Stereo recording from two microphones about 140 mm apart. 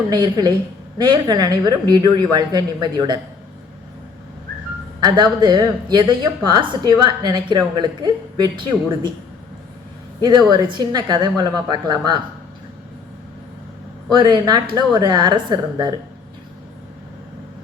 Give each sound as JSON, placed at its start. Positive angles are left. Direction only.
{"t": 0.1, "sound": "a woman's voice", "side_deg": -30}
{"t": 4.9, "sound": "speech", "side_deg": -30}
{"t": 10.2, "sound": "speech", "side_deg": -30}
{"t": 14.1, "sound": "speech", "side_deg": -30}